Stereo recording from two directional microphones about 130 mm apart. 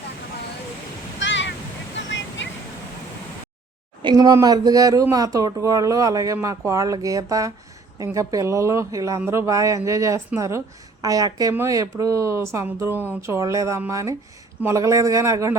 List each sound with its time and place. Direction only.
4.0 s speech: 30° right (ahead or behind)